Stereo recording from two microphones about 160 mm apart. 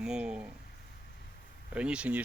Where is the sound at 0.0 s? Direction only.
5° right (ahead or behind).